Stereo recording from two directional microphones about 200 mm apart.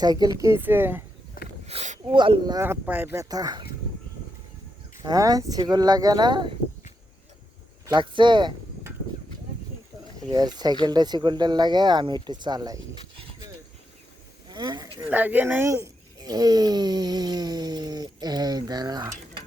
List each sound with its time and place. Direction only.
0.0 s speech: 20° right (ahead or behind)
1.6 s speech: 35° right (ahead or behind)
5.0 s speech: 20° right (ahead or behind)
7.9 s speech: 25° right (ahead or behind)
10.2 s speech: 20° right (ahead or behind)
14.5 s a sound: 20° right (ahead or behind)
15.1 s speech: 10° right (ahead or behind)